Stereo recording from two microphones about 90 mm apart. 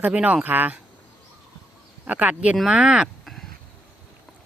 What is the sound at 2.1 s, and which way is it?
Speech, 15° right (ahead or behind).